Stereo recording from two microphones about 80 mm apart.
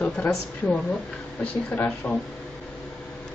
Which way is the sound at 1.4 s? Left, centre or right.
Centre.